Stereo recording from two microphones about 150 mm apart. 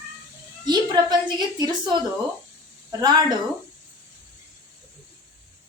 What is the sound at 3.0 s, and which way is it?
Speech, 30° right (ahead or behind).